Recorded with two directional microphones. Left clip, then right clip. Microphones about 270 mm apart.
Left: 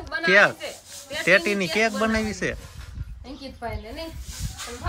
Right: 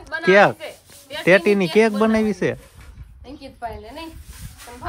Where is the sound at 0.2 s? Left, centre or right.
Centre.